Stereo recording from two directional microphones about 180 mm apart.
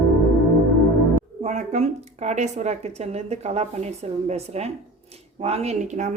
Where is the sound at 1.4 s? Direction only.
40° right (ahead or behind).